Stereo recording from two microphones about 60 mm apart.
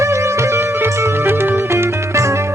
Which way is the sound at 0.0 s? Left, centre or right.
Right.